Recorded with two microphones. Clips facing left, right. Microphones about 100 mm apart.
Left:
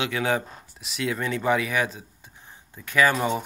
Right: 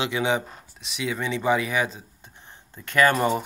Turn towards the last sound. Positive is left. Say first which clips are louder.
# right 2 dB
turn(degrees=0)  # may be behind; listen again after turning